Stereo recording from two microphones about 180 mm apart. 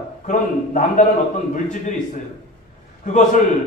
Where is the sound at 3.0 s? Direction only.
45° left (ahead or behind).